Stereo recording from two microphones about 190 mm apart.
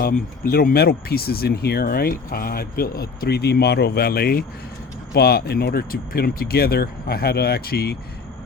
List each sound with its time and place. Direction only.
0.0 s speech: 50° left (ahead or behind)